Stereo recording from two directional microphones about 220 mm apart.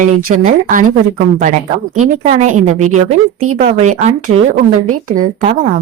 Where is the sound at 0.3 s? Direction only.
35° right (ahead or behind).